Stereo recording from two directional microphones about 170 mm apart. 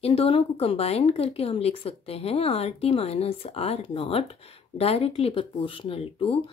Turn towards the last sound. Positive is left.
turn(degrees=30)  # may be behind; listen again after turning